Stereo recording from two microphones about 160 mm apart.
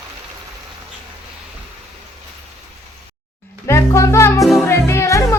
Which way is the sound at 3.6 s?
15° left (ahead or behind).